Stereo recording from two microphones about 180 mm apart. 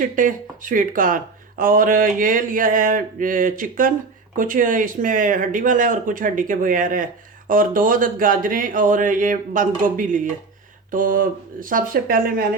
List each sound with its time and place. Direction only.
0.0 s speech: 45° right (ahead or behind)